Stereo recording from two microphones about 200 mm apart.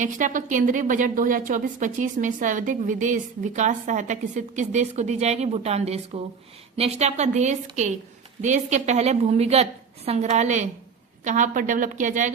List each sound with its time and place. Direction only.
0.0 s a woman's voice: 40° right (ahead or behind)